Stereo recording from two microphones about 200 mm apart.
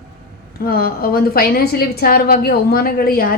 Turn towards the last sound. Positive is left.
turn(degrees=50)  # may be behind; listen again after turning